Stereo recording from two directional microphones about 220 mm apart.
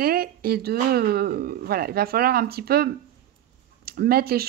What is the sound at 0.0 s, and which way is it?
Speech, 40° right (ahead or behind).